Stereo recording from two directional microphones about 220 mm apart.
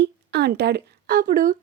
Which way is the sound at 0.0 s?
50° right (ahead or behind).